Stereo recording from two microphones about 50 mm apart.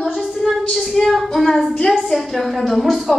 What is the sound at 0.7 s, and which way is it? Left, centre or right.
A woman's voice, centre.